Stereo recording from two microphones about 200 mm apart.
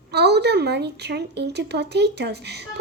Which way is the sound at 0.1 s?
55° right (ahead or behind).